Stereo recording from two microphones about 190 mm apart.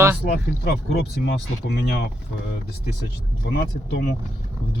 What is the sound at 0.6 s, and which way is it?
Speech, 55° left (ahead or behind).